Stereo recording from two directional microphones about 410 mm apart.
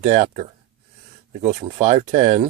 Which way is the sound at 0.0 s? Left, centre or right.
Centre.